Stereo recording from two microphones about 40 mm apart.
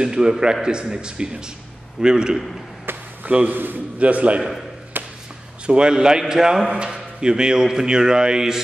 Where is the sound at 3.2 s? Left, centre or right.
Right.